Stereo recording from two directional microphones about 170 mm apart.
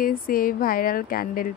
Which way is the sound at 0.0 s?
55° left (ahead or behind).